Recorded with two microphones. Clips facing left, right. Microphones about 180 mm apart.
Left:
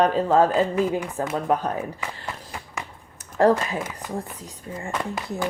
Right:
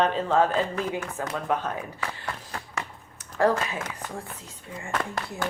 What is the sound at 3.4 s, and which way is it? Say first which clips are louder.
Speech: left 4 dB; 35° left (ahead or behind).